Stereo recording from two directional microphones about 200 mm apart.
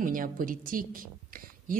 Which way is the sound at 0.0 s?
45° right (ahead or behind).